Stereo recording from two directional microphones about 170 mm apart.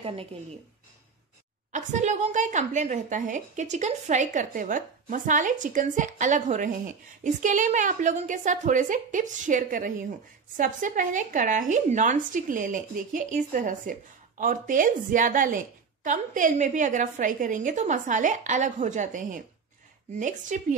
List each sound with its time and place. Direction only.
0.0 s a woman's voice: 35° right (ahead or behind)
1.7 s speech: 45° right (ahead or behind)